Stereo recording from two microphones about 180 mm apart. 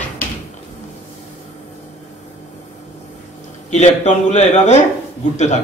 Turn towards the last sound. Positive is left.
turn(degrees=40)  # may be behind; listen again after turning